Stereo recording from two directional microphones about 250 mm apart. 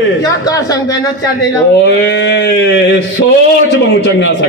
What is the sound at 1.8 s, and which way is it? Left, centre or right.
Speech, left.